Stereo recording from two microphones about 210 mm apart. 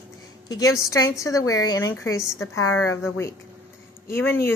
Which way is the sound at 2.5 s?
80° left.